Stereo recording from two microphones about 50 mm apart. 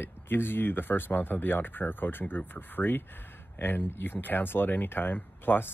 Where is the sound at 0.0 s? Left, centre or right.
Left.